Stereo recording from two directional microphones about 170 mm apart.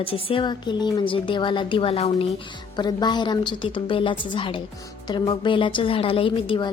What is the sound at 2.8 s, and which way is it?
A woman's voice, 25° left (ahead or behind).